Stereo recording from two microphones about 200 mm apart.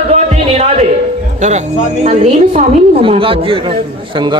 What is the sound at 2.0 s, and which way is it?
A woman's voice, 35° right (ahead or behind).